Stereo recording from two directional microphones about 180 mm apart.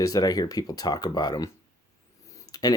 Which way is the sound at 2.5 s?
20° left (ahead or behind).